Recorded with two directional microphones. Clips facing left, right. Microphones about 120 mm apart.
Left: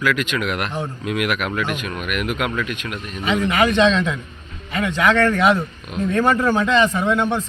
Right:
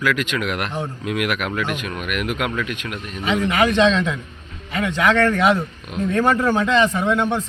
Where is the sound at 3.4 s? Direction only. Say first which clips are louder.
Even; 20° right (ahead or behind).